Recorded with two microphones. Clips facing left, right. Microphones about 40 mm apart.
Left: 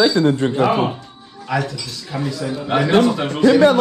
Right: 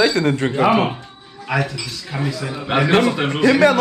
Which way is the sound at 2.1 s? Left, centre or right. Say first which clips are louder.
Even; right.